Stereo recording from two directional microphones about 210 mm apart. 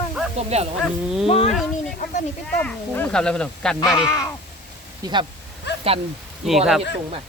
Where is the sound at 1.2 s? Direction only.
30° left (ahead or behind).